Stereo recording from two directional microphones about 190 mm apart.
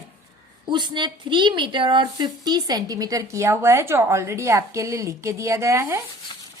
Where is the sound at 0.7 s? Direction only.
25° right (ahead or behind).